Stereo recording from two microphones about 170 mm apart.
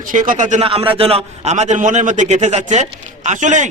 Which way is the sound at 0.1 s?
50° right (ahead or behind).